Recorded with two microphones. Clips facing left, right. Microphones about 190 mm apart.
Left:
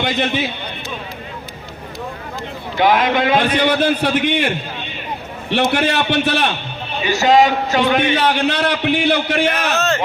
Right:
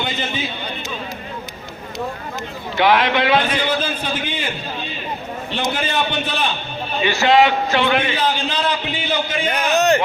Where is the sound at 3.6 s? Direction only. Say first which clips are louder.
Left 6 dB; 65° left (ahead or behind).